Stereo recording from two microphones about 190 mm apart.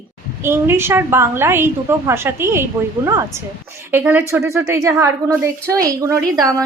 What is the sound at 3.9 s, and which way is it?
A woman's voice, 10° right (ahead or behind).